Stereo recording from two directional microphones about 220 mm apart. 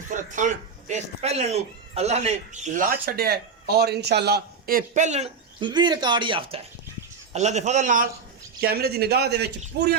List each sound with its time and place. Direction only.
0.1 s speech: 35° right (ahead or behind)
8.6 s speech: 45° right (ahead or behind)